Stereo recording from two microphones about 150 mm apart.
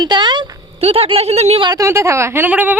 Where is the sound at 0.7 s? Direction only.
40° right (ahead or behind).